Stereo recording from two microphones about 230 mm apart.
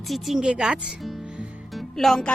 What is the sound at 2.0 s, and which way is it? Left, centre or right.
Speech, centre.